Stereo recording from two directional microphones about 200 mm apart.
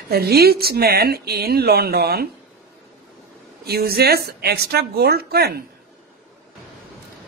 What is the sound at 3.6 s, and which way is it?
A man's voice, 50° right (ahead or behind).